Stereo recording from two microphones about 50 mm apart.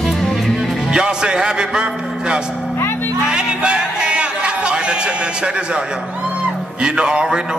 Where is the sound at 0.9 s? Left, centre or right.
Centre.